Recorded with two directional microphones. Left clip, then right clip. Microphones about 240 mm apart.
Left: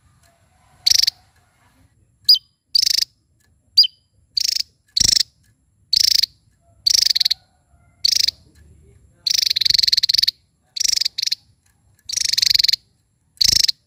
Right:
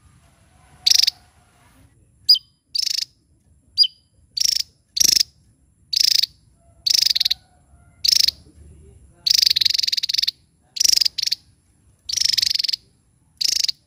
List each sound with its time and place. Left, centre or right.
0.9 s cricket: centre
2.7 s cricket: left
4.4 s insect: centre
5.9 s cricket: centre
9.2 s frog: centre
10.8 s cricket: centre
12.1 s frog: centre
12.5 s frog: left